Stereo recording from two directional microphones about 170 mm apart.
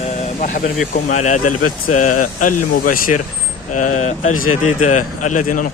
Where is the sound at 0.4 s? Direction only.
50° left (ahead or behind).